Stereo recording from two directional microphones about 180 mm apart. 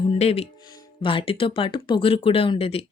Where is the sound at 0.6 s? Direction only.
20° left (ahead or behind).